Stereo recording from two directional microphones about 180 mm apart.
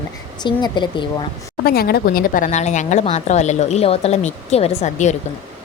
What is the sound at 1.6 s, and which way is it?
A woman's voice, 60° left (ahead or behind).